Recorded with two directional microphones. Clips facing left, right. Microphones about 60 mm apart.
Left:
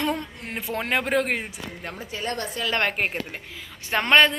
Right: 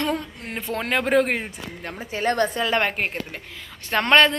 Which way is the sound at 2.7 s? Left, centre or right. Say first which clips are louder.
Right 2 dB; centre.